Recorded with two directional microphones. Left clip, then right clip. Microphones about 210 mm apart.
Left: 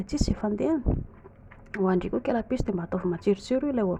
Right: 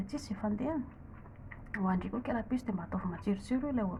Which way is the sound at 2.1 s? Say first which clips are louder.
Left 9 dB; 40° left (ahead or behind).